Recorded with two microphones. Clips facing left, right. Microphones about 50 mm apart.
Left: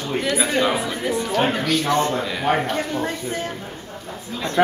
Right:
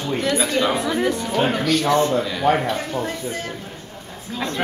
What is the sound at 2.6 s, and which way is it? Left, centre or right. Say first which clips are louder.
Speech: even; left.